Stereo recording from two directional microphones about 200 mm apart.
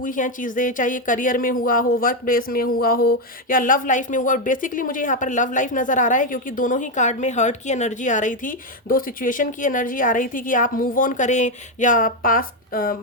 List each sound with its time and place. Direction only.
0.0 s speech: 40° left (ahead or behind)